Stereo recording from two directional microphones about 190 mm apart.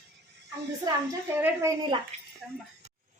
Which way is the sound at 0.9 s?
20° right (ahead or behind).